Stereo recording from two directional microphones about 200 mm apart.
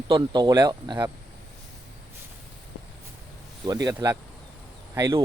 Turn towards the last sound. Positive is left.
turn(degrees=-15)  # may be behind; listen again after turning